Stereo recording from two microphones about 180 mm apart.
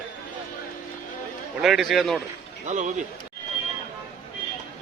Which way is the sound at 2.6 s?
45° right (ahead or behind).